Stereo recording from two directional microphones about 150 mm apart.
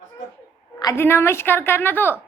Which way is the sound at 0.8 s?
20° left (ahead or behind).